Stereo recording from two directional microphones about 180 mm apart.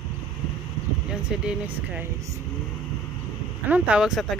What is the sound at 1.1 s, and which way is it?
Speech, 5° right (ahead or behind).